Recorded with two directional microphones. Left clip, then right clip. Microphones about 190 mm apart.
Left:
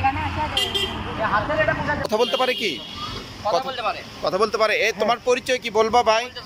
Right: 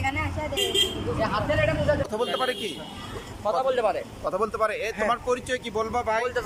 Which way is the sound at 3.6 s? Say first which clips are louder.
Right 2 dB; 70° right (ahead or behind).